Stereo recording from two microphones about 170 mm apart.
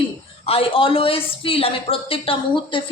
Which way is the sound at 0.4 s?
35° left (ahead or behind).